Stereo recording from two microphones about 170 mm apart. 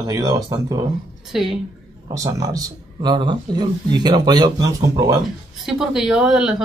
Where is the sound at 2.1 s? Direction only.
20° right (ahead or behind).